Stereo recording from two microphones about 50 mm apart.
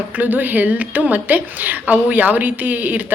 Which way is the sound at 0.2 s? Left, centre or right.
Right.